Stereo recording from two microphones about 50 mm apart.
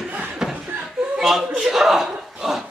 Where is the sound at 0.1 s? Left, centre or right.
Right.